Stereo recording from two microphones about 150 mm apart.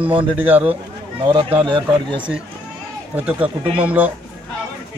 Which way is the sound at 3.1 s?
10° right (ahead or behind).